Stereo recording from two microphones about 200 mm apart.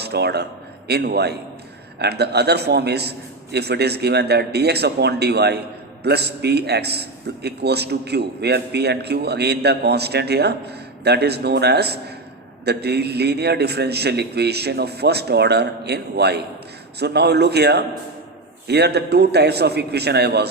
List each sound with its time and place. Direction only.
0.0 s a man's voice: 55° right (ahead or behind)